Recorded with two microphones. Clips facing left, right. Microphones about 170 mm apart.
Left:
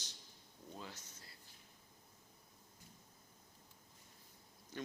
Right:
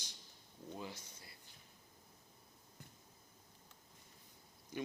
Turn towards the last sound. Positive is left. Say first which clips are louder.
# right 3 dB
turn(degrees=-10)  # may be behind; listen again after turning